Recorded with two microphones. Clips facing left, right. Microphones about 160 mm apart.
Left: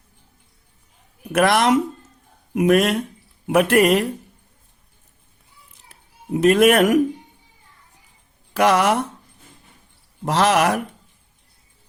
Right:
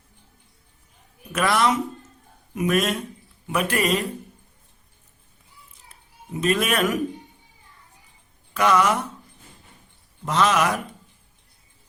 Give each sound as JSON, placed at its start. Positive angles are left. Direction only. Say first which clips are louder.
{"t": 1.3, "sound": "a man's voice", "louder": "left 5 dB", "side_deg": 65}
{"t": 5.9, "sound": "a child's voice", "louder": "left 9 dB", "side_deg": 70}
{"t": 8.5, "sound": "speech", "louder": "left 3 dB", "side_deg": 65}
{"t": 10.2, "sound": "a man's voice", "louder": "left 3 dB", "side_deg": 65}